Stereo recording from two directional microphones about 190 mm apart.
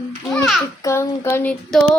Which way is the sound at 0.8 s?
15° left (ahead or behind).